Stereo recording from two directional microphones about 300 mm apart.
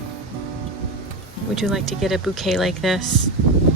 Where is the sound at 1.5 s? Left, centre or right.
Centre.